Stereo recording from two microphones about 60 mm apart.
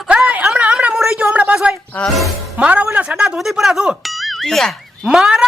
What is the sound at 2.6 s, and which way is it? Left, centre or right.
A woman's voice, right.